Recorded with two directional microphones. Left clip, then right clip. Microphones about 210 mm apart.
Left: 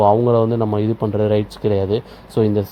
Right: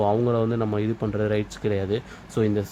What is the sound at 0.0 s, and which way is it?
Speech, 10° left (ahead or behind).